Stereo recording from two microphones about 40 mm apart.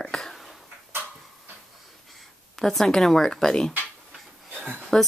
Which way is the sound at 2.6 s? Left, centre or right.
Centre.